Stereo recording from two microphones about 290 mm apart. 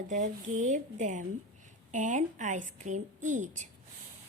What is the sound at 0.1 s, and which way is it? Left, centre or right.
A woman's voice, right.